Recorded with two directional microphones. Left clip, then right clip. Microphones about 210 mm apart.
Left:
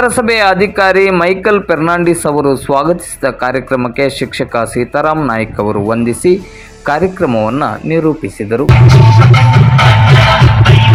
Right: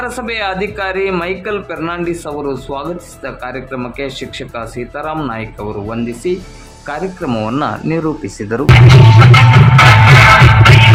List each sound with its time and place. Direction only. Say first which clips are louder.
0.0 s speech: left 9 dB; 20° left (ahead or behind)
7.3 s speech: left 4 dB; centre (ahead or behind)
8.7 s music: right 5 dB; 40° left (ahead or behind)